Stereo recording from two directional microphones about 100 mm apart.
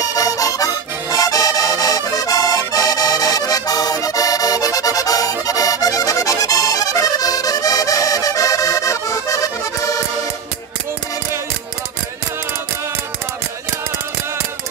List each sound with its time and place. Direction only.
0.0 s music: 35° left (ahead or behind)
1.1 s accordion: 35° left (ahead or behind)
5.5 s music: 35° left (ahead or behind)